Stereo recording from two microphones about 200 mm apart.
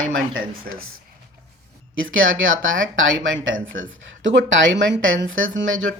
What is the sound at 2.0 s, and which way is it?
Speech, 75° right (ahead or behind).